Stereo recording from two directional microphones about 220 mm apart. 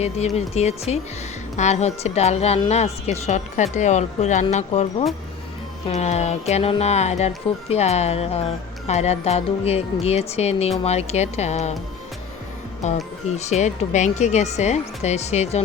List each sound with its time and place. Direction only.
0.0 s speech: 30° left (ahead or behind)
12.8 s speech: 30° left (ahead or behind)